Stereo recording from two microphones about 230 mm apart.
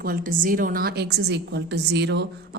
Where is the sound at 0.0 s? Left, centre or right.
Right.